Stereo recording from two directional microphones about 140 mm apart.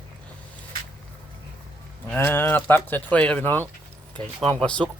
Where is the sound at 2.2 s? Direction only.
15° left (ahead or behind).